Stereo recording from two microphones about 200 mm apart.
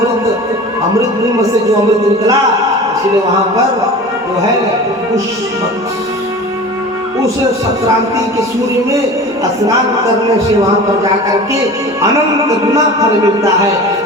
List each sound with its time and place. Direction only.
12.7 s speech: 15° right (ahead or behind)